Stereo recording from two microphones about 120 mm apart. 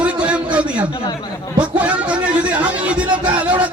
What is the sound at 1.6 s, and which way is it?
Music, 10° right (ahead or behind).